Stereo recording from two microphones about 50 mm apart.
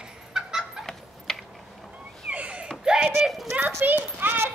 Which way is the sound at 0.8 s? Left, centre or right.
Centre.